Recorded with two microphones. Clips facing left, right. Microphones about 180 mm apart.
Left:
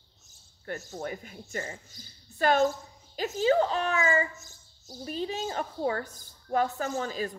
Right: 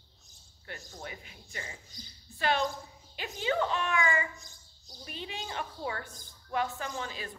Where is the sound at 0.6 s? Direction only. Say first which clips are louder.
Left 9 dB; 45° left (ahead or behind).